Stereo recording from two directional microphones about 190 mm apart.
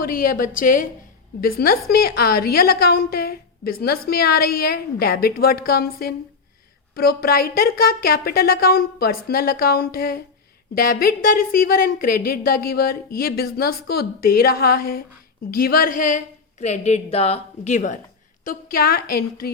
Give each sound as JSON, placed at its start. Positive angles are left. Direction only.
{"t": 0.0, "sound": "a woman's voice", "side_deg": 50}
{"t": 18.4, "sound": "a woman's voice", "side_deg": 50}